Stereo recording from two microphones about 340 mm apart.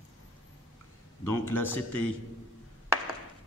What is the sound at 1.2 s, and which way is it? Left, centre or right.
Speech, centre.